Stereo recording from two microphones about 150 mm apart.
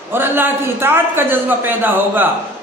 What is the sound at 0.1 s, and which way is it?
A man's voice, 15° right (ahead or behind).